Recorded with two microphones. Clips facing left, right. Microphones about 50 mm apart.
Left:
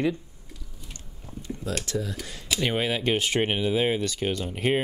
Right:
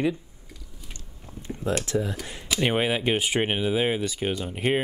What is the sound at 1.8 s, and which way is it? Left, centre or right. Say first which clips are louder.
Speech: right 3 dB; right.